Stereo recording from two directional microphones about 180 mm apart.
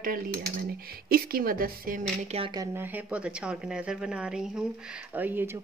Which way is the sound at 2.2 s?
35° right (ahead or behind).